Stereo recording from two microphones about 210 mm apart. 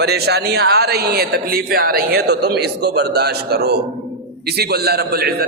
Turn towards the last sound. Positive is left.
turn(degrees=-50)  # may be behind; listen again after turning